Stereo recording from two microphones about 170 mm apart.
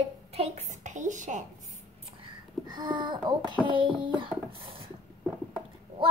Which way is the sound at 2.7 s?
25° right (ahead or behind).